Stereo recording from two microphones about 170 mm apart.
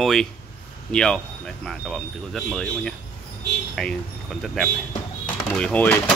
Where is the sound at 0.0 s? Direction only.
5° left (ahead or behind).